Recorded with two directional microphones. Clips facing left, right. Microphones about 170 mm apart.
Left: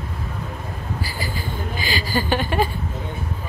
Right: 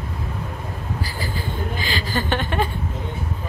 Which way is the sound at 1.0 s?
5° left (ahead or behind).